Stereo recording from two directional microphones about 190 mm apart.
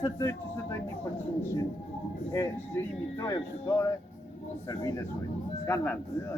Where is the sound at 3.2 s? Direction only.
15° left (ahead or behind).